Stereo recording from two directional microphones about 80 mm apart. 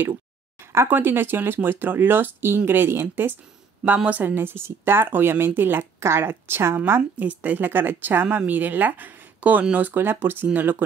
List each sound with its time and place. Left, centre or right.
0.8 s a woman's voice: right
6.9 s a woman's voice: right